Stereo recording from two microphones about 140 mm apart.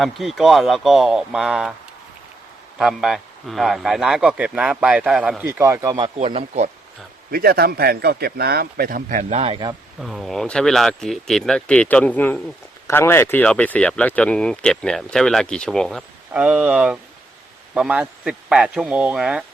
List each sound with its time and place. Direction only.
0.0 s a man's voice: centre (ahead or behind)
2.7 s a man's voice: 5° right (ahead or behind); by 6.1 s 25° right (ahead or behind)
6.1 s speech: 50° right (ahead or behind)
7.3 s speech: 90° right
9.3 s speech: 45° right (ahead or behind)
10.0 s a man's voice: centre (ahead or behind)
16.3 s speech: 10° right (ahead or behind)